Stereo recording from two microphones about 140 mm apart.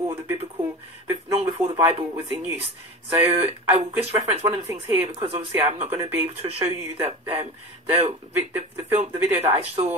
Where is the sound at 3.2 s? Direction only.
45° right (ahead or behind).